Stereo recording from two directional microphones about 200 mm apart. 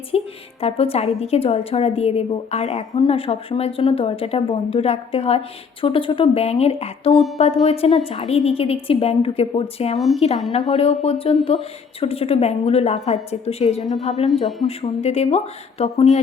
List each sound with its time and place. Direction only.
0.6 s a woman's voice: 30° left (ahead or behind)